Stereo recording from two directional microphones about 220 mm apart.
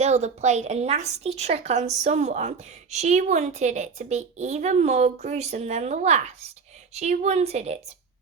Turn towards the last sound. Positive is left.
turn(degrees=-30)  # may be behind; listen again after turning